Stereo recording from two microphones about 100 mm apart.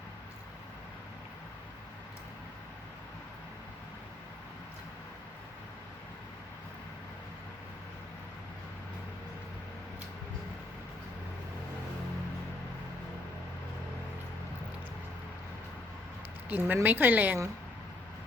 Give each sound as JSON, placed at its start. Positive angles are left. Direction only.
{"t": 16.5, "sound": "a woman's voice", "side_deg": -15}